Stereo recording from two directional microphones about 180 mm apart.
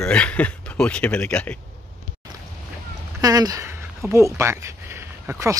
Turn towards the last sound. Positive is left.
turn(degrees=-15)  # may be behind; listen again after turning